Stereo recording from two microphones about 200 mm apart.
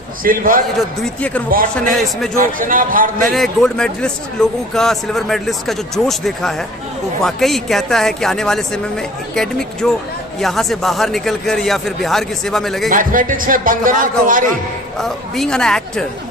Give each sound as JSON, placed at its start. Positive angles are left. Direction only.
{"t": 0.2, "sound": "a man's voice", "side_deg": -45}
{"t": 1.0, "sound": "speech", "side_deg": 5}
{"t": 1.5, "sound": "a man's voice", "side_deg": -45}
{"t": 3.2, "sound": "a man's voice", "side_deg": 0}
{"t": 12.9, "sound": "a man's voice", "side_deg": -45}
{"t": 14.9, "sound": "a man's voice", "side_deg": 0}